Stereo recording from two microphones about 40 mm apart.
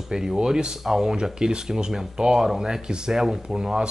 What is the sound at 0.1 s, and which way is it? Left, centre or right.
Speech, centre.